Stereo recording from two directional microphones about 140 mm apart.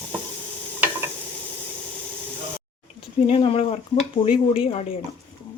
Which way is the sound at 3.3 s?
45° left (ahead or behind).